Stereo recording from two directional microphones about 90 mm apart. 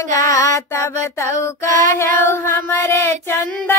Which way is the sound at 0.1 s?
40° left (ahead or behind).